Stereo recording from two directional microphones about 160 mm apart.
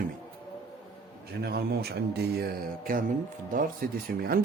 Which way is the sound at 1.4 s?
75° right (ahead or behind).